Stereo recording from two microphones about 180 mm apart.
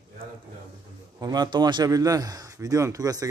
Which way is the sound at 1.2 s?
20° right (ahead or behind).